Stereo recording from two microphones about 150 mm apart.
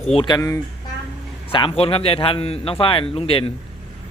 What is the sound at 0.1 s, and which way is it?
Speech, 35° left (ahead or behind).